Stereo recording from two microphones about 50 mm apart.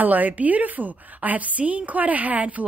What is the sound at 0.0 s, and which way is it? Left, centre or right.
A woman's voice, right.